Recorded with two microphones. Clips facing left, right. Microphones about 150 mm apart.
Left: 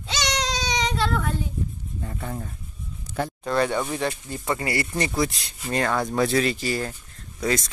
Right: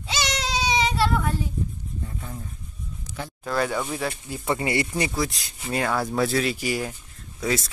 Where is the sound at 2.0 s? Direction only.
70° left (ahead or behind).